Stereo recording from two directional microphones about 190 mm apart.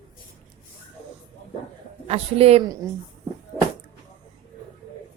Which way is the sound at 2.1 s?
30° right (ahead or behind).